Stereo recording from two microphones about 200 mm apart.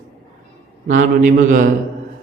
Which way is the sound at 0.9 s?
40° right (ahead or behind).